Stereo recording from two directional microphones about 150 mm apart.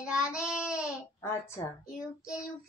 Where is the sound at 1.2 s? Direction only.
20° left (ahead or behind).